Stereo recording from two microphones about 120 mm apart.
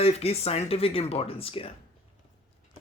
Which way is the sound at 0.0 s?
60° left (ahead or behind).